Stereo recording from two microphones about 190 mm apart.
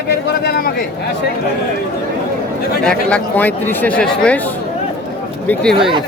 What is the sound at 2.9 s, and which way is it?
Speech, 5° left (ahead or behind).